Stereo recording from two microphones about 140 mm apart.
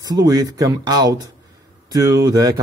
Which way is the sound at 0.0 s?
25° right (ahead or behind).